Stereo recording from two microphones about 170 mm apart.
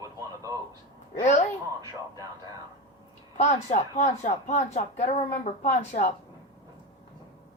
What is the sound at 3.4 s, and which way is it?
Speech, 40° left (ahead or behind).